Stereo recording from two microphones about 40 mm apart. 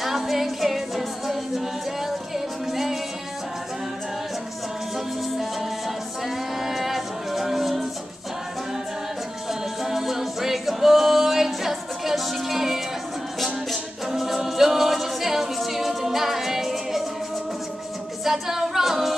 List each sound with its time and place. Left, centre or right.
0.0 s a capella: centre
4.9 s music: centre
9.5 s a capella: centre
14.0 s a capella: centre
18.2 s a capella: centre